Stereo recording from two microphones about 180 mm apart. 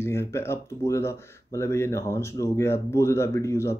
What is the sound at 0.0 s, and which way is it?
Speech, 15° left (ahead or behind).